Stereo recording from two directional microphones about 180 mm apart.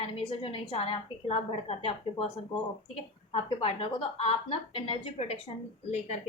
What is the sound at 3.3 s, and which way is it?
A woman's voice, 35° left (ahead or behind).